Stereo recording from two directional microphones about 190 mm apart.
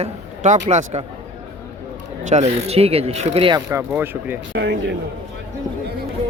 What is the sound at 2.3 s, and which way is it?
Speech, 35° right (ahead or behind).